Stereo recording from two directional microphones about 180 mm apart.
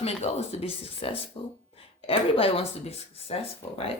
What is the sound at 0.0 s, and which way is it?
Speech, 35° left (ahead or behind).